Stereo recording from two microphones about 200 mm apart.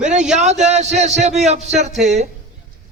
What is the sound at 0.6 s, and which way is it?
A man's voice, 35° right (ahead or behind).